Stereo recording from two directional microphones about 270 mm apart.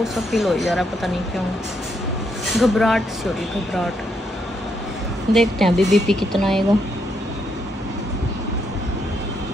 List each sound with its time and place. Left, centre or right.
0.0 s speech: centre
2.5 s speech: centre
5.3 s speech: centre